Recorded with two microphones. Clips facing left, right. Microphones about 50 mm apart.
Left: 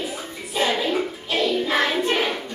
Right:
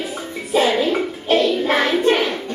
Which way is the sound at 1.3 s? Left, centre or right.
Right.